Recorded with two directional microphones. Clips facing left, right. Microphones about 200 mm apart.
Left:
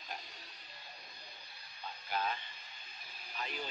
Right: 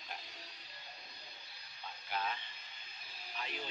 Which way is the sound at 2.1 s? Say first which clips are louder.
Left 2 dB; 40° left (ahead or behind).